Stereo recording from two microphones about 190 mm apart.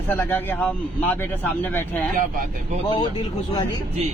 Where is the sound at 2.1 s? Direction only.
45° right (ahead or behind).